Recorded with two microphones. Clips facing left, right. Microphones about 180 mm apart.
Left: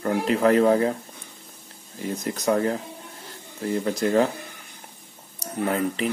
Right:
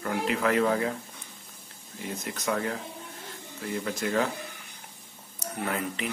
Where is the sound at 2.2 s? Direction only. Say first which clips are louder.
Left 8 dB; 35° left (ahead or behind).